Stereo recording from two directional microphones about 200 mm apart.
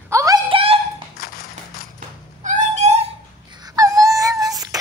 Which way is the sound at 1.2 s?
50° left (ahead or behind).